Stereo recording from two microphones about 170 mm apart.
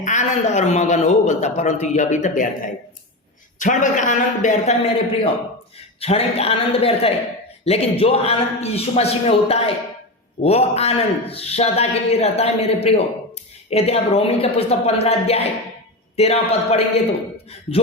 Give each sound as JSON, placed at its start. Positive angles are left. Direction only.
{"t": 0.0, "sound": "a man's voice", "side_deg": 45}